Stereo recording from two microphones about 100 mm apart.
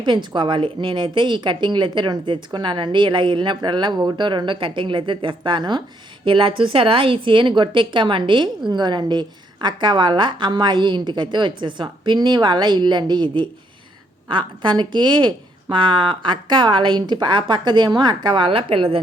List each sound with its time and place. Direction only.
0.0 s a woman's voice: 50° right (ahead or behind); by 18.9 s 70° right (ahead or behind)